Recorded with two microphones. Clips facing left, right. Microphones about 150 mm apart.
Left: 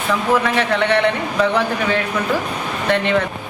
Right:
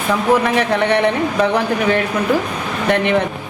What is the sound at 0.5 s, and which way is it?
Speech, 15° right (ahead or behind).